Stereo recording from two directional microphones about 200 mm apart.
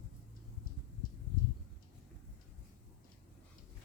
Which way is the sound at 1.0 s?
45° left (ahead or behind).